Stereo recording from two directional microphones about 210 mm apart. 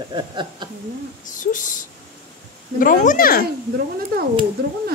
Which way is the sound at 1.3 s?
40° left (ahead or behind).